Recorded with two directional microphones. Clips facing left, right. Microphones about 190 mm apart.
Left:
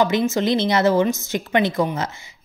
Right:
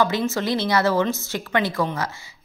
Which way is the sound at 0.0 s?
20° left (ahead or behind).